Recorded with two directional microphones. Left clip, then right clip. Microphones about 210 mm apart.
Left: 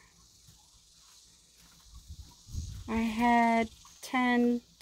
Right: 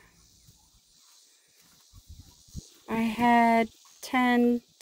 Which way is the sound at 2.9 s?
30° right (ahead or behind).